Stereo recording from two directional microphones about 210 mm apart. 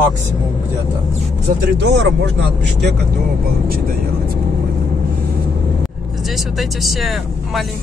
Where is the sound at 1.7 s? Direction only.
55° right (ahead or behind).